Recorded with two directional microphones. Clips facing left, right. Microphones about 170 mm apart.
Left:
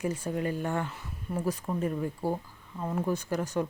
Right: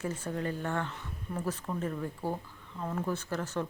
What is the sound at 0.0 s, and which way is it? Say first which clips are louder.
Speech: left 4 dB; 10° left (ahead or behind).